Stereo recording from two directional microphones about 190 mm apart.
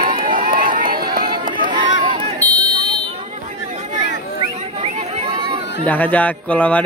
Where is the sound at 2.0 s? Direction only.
25° right (ahead or behind).